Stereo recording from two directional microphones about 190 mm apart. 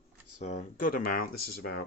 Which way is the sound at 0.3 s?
40° left (ahead or behind).